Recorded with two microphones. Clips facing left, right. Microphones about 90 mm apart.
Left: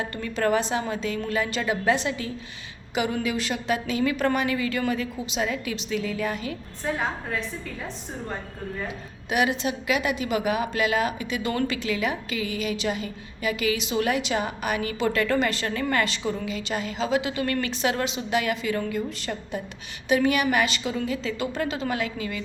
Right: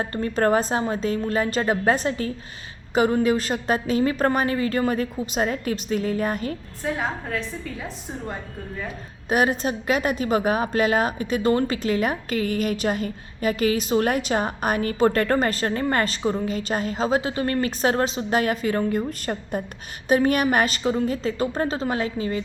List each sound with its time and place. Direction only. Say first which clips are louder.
0.0 s a woman's voice: right 4 dB; 40° right (ahead or behind)
6.8 s a woman's voice: right 1 dB; centre (ahead or behind)
9.3 s a woman's voice: right 3 dB; 40° right (ahead or behind)